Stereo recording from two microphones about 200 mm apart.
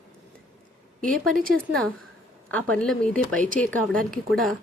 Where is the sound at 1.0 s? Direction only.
45° right (ahead or behind).